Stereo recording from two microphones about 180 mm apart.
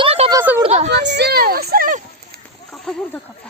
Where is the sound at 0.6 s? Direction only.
35° right (ahead or behind).